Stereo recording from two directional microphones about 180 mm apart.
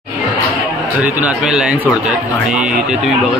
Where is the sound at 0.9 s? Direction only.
10° right (ahead or behind).